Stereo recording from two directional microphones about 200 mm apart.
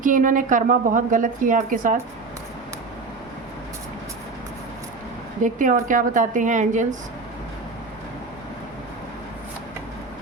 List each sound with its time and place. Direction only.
0.0 s a woman's voice: 40° right (ahead or behind)
5.4 s a woman's voice: 40° right (ahead or behind)